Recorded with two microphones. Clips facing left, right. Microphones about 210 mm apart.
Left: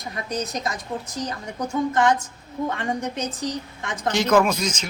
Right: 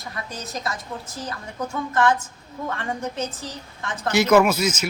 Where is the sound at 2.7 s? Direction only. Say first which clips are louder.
Left 2 dB; 15° left (ahead or behind).